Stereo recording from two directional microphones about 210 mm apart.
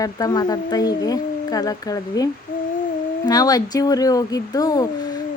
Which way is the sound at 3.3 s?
20° left (ahead or behind).